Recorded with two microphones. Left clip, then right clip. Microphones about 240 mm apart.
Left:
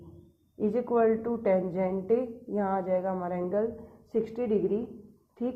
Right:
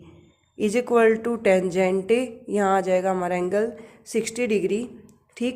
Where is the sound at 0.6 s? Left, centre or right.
Right.